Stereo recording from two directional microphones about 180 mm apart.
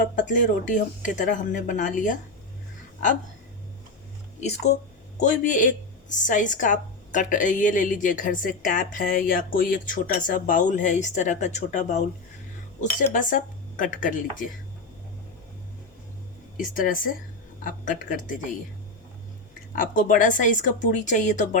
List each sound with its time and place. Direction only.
0.2 s a woman's voice: 45° left (ahead or behind)
4.4 s a woman's voice: 40° left (ahead or behind)
13.1 s a woman's voice: 45° left (ahead or behind)
16.6 s a woman's voice: 50° left (ahead or behind)
19.7 s a woman's voice: 50° left (ahead or behind)